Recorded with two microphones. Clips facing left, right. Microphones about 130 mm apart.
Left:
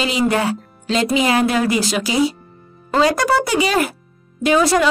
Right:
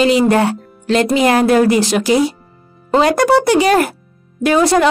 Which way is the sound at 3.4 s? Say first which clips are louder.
Right 6 dB; 55° right (ahead or behind).